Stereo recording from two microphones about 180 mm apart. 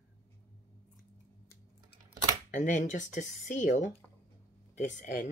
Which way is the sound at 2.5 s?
45° left (ahead or behind).